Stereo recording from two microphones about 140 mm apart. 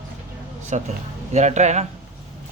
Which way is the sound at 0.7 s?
55° right (ahead or behind).